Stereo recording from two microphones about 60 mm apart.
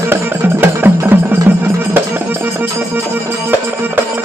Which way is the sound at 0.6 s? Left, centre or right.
Right.